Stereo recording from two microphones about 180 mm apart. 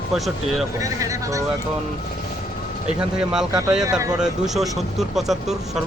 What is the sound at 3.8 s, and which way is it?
Speech, 20° right (ahead or behind).